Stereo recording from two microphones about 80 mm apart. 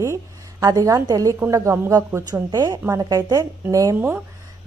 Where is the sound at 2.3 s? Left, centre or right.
Right.